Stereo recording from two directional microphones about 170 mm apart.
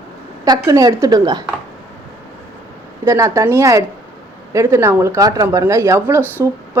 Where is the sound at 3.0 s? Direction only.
15° right (ahead or behind).